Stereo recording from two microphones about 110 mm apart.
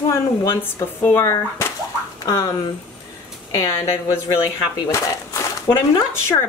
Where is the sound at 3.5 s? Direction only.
30° left (ahead or behind).